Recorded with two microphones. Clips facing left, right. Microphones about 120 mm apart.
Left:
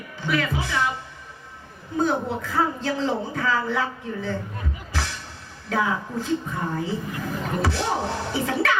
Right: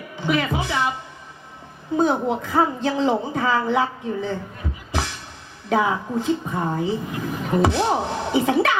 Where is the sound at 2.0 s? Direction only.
20° right (ahead or behind).